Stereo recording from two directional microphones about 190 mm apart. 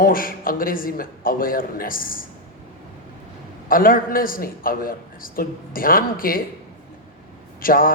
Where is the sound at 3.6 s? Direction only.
45° left (ahead or behind).